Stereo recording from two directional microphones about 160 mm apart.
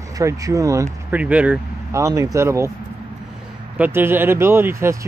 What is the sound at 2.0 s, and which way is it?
Speech, 20° right (ahead or behind).